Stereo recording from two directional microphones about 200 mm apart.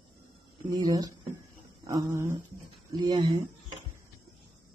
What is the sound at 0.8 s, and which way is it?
Speech, 20° right (ahead or behind).